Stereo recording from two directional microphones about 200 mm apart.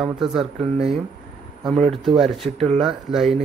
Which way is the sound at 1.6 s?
30° right (ahead or behind).